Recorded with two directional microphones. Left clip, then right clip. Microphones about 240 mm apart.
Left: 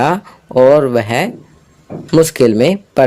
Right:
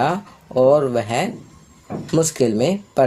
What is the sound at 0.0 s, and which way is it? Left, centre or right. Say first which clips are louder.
Speech: left 6 dB; left.